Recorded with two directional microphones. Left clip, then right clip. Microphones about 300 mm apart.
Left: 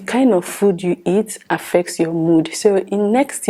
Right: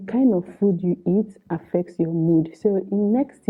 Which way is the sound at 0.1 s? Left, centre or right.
Centre.